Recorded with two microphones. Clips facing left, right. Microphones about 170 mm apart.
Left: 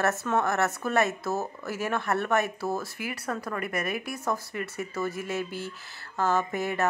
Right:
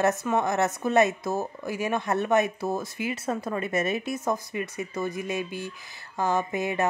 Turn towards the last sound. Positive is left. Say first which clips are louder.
# right 1 dB
turn(degrees=-20)  # may be behind; listen again after turning